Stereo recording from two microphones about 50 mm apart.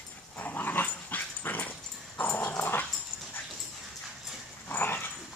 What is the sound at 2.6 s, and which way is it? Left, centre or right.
Dog, left.